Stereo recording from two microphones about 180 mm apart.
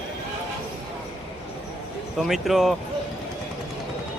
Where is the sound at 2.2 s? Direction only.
Centre (ahead or behind).